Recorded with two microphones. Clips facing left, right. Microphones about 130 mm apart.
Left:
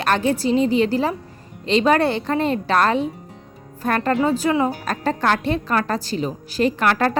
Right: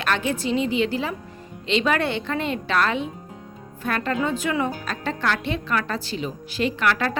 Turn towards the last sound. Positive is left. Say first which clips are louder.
# left 4 dB
turn(degrees=40)  # may be behind; listen again after turning